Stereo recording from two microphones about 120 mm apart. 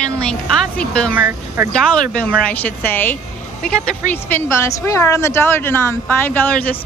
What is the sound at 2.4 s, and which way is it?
Speech, 15° left (ahead or behind).